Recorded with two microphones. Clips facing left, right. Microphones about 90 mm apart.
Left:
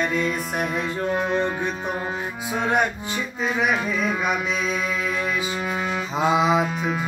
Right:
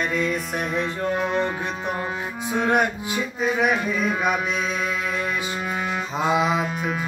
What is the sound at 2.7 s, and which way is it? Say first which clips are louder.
Music: even; 5° right (ahead or behind).